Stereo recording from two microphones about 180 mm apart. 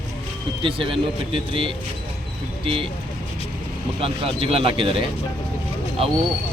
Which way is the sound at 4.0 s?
30° right (ahead or behind).